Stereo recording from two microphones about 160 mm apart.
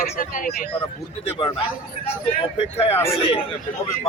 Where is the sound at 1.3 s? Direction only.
30° left (ahead or behind).